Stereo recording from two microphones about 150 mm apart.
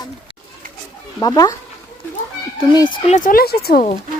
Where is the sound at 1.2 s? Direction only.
25° left (ahead or behind).